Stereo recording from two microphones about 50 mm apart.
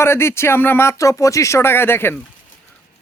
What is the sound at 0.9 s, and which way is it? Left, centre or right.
Speech, left.